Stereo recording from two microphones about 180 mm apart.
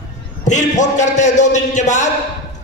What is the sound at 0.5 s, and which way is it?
A man's voice, 40° left (ahead or behind).